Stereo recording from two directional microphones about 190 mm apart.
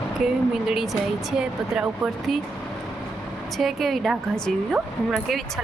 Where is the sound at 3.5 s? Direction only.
Centre (ahead or behind).